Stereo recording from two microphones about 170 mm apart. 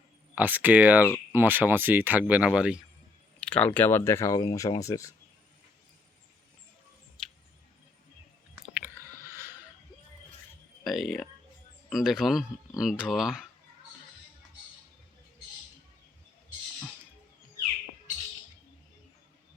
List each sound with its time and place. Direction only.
0.3 s speech: 10° right (ahead or behind)
3.4 s speech: 5° left (ahead or behind)
7.2 s a sound: 5° left (ahead or behind)
8.5 s chewing: 10° right (ahead or behind)
10.8 s speech: centre (ahead or behind)